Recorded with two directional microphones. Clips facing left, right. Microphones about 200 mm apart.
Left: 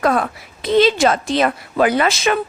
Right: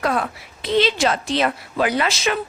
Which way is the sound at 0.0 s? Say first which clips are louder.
Left 4 dB; 45° left (ahead or behind).